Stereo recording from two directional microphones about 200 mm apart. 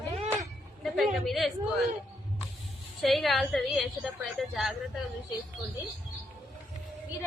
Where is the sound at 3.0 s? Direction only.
Centre (ahead or behind).